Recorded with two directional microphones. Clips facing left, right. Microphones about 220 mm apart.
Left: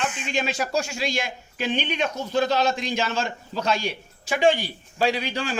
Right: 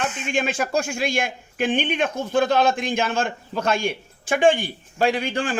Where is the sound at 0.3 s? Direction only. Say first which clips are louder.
Right 4 dB; 50° right (ahead or behind).